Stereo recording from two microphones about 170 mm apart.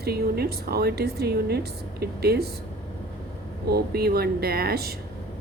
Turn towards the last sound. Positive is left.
turn(degrees=-65)  # may be behind; listen again after turning